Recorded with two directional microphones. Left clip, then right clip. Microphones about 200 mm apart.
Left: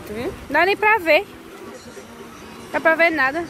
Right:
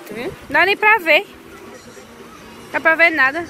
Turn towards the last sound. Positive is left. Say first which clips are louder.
# right 3 dB
turn(degrees=10)  # may be behind; listen again after turning